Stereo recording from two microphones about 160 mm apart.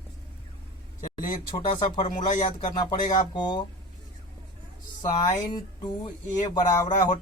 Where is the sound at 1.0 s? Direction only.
60° left (ahead or behind).